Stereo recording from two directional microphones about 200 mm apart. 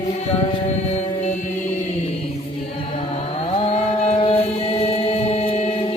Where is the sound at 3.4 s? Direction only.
30° left (ahead or behind).